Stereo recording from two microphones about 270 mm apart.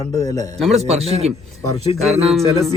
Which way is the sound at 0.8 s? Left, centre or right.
Right.